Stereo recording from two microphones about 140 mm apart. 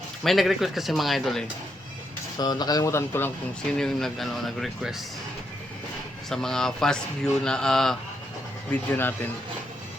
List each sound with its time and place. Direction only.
0.2 s speech: centre (ahead or behind)
2.4 s speech: 30° left (ahead or behind)
3.8 s speech: 5° left (ahead or behind)
6.3 s speech: 5° left (ahead or behind)